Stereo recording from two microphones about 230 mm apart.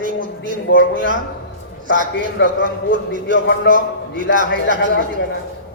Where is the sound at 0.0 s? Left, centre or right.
Right.